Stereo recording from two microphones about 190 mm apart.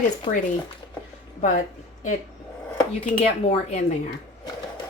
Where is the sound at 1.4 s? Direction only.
40° left (ahead or behind).